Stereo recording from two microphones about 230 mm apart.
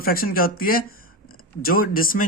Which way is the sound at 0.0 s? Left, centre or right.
Left.